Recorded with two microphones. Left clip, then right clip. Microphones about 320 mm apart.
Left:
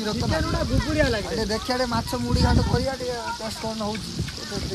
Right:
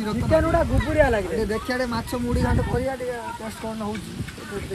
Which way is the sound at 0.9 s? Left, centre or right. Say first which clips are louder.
Right 4 dB; centre.